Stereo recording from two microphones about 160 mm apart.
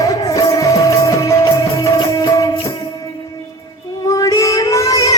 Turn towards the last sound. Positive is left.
turn(degrees=20)  # may be behind; listen again after turning